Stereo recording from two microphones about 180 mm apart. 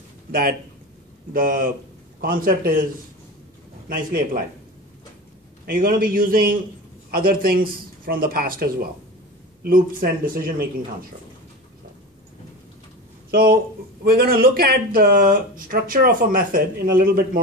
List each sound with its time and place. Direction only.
0.3 s speech: 55° right (ahead or behind)
3.9 s speech: 55° right (ahead or behind)
5.7 s speech: 55° right (ahead or behind)
13.3 s speech: 55° right (ahead or behind)